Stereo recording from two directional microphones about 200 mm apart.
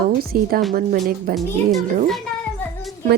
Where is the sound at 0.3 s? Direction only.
45° right (ahead or behind).